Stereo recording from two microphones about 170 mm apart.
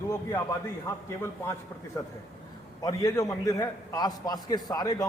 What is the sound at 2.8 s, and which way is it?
A man's voice, 20° left (ahead or behind).